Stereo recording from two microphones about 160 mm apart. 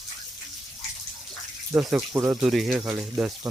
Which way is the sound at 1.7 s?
5° right (ahead or behind).